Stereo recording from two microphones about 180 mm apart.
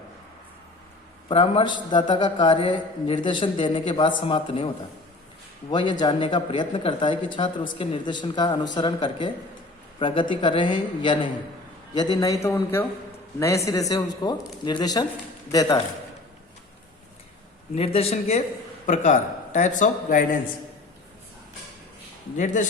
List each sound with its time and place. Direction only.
1.3 s a man's voice: 30° left (ahead or behind)
5.7 s a man's voice: 25° left (ahead or behind)
17.7 s a man's voice: 35° left (ahead or behind)